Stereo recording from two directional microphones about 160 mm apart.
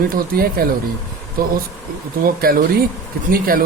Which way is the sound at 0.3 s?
65° right (ahead or behind).